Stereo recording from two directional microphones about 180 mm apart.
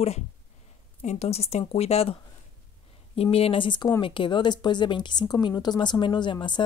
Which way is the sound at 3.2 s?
35° left (ahead or behind).